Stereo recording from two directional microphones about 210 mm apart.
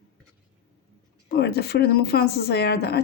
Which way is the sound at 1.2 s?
50° left (ahead or behind).